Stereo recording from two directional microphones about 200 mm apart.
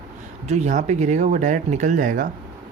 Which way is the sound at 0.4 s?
35° right (ahead or behind).